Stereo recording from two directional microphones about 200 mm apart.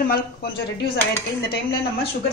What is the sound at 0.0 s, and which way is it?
Speech, 50° left (ahead or behind).